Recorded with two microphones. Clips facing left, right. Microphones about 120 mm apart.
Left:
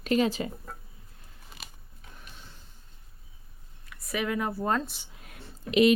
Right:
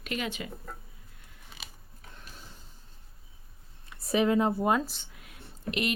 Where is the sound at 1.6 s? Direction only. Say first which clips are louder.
Even; centre (ahead or behind).